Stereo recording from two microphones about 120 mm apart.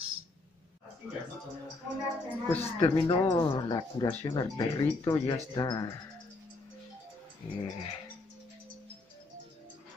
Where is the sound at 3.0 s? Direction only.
35° left (ahead or behind).